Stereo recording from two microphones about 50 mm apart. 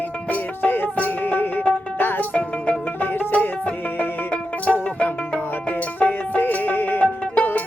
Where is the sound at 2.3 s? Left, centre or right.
Left.